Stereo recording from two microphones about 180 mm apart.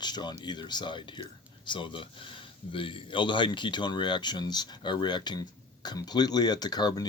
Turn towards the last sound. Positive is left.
turn(degrees=25)  # may be behind; listen again after turning